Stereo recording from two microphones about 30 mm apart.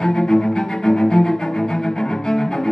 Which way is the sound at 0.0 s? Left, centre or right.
Centre.